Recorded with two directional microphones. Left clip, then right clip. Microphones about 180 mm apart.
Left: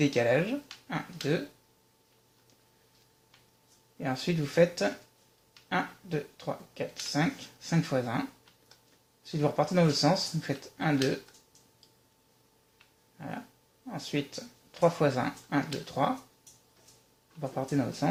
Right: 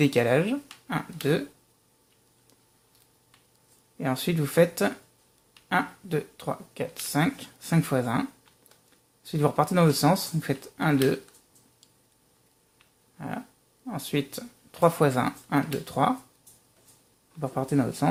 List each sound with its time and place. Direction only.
0.0 s speech: 50° right (ahead or behind)
3.9 s speech: 55° right (ahead or behind)
13.1 s dog: 50° right (ahead or behind)
13.8 s speech: 55° right (ahead or behind)
17.4 s speech: 50° right (ahead or behind)